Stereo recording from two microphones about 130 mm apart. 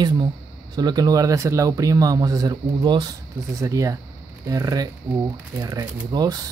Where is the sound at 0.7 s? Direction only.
30° right (ahead or behind).